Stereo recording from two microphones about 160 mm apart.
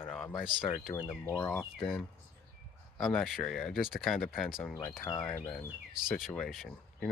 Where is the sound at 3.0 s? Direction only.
Centre (ahead or behind).